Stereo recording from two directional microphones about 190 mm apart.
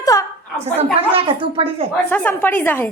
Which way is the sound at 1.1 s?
30° right (ahead or behind).